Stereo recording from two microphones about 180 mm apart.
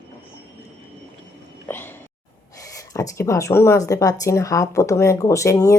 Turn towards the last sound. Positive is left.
turn(degrees=15)  # may be behind; listen again after turning